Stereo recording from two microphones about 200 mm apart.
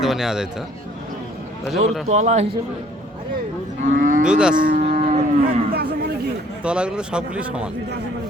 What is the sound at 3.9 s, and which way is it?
Moo, 40° right (ahead or behind).